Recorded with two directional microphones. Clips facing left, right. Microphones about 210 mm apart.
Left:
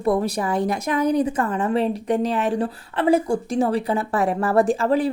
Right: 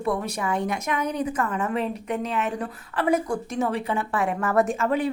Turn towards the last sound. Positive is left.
turn(degrees=35)  # may be behind; listen again after turning